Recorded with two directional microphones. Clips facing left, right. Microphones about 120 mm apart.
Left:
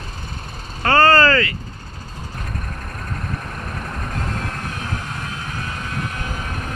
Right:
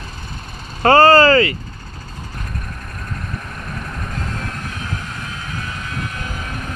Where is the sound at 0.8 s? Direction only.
15° right (ahead or behind).